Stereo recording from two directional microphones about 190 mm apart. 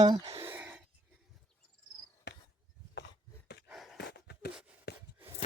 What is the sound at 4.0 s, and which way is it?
Dog, 60° left (ahead or behind).